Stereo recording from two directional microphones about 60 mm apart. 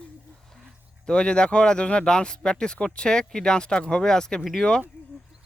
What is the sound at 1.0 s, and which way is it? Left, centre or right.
Speech, centre.